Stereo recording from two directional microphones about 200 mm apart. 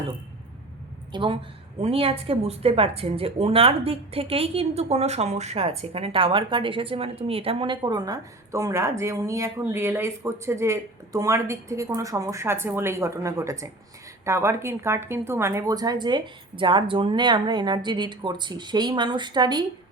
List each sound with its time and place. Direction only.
1.1 s speech: 25° right (ahead or behind)